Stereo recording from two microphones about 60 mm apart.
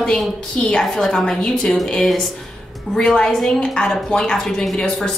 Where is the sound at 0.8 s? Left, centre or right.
Centre.